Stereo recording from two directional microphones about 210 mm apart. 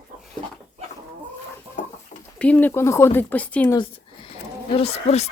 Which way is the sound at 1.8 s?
35° left (ahead or behind).